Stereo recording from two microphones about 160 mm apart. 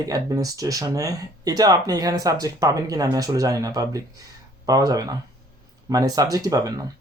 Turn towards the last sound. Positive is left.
turn(degrees=-20)  # may be behind; listen again after turning